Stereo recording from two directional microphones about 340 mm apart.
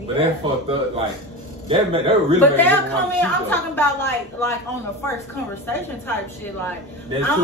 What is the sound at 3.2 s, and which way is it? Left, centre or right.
Speech, centre.